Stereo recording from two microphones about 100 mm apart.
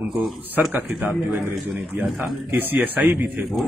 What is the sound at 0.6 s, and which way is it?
Speech, 15° right (ahead or behind).